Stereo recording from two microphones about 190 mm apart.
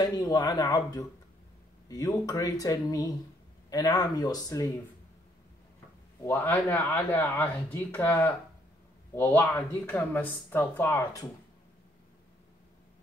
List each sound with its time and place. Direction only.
0.0 s speech: 20° left (ahead or behind)
6.2 s speech: 10° left (ahead or behind)